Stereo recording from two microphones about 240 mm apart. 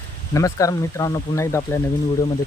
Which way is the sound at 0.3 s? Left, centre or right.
Centre.